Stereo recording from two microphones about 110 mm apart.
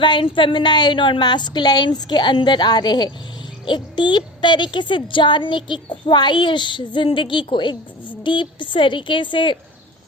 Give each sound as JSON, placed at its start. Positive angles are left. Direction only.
{"t": 0.0, "sound": "speech", "side_deg": 45}